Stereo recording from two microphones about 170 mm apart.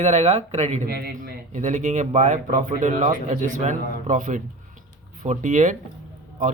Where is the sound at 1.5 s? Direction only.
45° right (ahead or behind).